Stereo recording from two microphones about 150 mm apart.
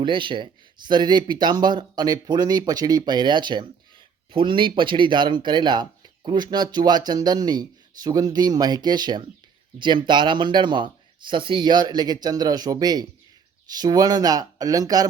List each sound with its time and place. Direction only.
0.0 s speech: 35° right (ahead or behind)